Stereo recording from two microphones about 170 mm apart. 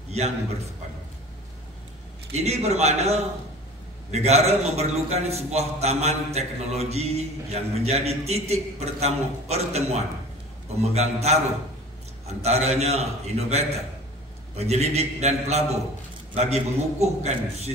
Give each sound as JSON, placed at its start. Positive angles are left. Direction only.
{"t": 2.3, "sound": "a man's voice", "side_deg": -40}
{"t": 12.4, "sound": "a man's voice", "side_deg": -40}